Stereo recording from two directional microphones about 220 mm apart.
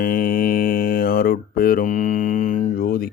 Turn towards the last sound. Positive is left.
turn(degrees=40)  # may be behind; listen again after turning